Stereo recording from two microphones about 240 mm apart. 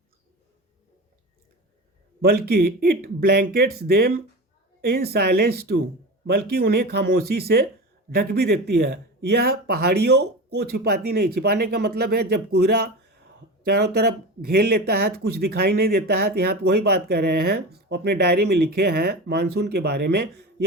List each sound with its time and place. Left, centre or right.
2.2 s speech: right